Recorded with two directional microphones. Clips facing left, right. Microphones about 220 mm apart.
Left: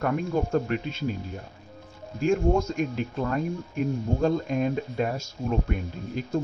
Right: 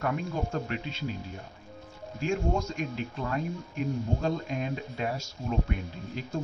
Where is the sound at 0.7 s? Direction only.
50° left (ahead or behind).